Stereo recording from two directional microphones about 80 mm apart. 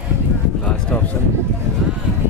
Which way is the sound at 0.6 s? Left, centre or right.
Centre.